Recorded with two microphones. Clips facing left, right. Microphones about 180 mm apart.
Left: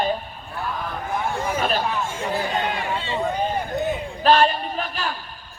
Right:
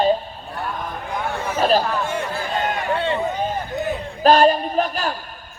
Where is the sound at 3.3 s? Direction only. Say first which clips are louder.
Even; 10° left (ahead or behind).